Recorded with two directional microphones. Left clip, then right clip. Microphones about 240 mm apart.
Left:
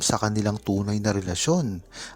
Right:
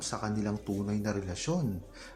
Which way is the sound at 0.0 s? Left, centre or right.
Left.